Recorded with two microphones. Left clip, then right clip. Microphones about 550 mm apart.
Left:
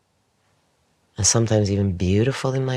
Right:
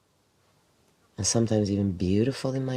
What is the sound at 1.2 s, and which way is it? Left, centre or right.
Speech, left.